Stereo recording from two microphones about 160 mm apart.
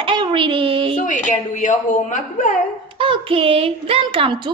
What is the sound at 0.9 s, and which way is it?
A woman's voice, 50° left (ahead or behind).